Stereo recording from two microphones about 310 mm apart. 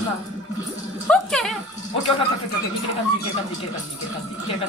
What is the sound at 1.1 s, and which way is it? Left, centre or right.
Music, centre.